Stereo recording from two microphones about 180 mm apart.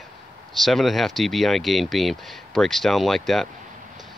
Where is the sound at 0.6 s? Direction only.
Centre (ahead or behind).